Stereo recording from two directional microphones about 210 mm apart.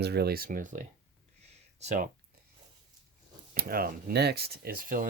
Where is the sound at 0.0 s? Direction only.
50° right (ahead or behind); by 2.0 s 30° right (ahead or behind).